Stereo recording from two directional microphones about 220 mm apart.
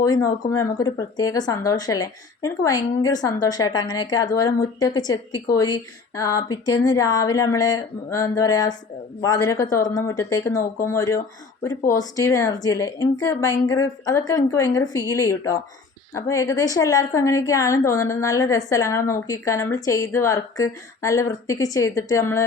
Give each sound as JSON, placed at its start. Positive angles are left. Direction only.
{"t": 0.0, "sound": "a woman's voice", "side_deg": 15}